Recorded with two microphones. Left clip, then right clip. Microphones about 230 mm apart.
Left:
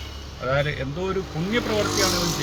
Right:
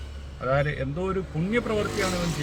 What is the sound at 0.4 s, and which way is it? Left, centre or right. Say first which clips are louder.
Speech: left 1 dB; centre.